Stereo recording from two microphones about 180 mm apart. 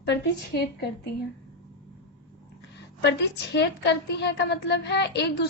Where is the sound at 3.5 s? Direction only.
70° left (ahead or behind).